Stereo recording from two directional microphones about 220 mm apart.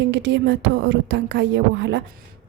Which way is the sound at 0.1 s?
55° right (ahead or behind).